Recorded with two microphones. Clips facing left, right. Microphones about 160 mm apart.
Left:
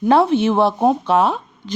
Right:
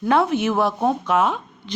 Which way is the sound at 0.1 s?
30° left (ahead or behind).